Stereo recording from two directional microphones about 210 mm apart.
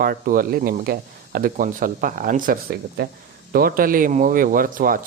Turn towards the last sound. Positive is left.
turn(degrees=-40)  # may be behind; listen again after turning